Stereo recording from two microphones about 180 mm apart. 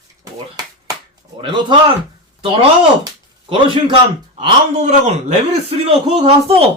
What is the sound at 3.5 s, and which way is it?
A man's voice, 30° right (ahead or behind).